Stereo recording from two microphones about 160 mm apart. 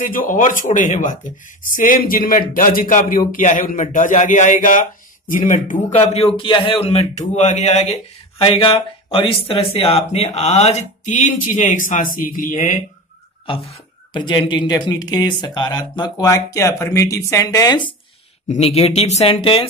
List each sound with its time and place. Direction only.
0.0 s a man's voice: 60° left (ahead or behind)
13.5 s speech: 30° left (ahead or behind)
18.5 s speech: 40° left (ahead or behind)